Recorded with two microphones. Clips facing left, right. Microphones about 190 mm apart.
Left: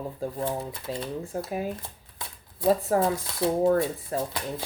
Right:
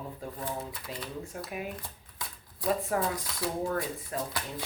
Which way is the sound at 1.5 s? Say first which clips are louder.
Left 6 dB; 30° left (ahead or behind).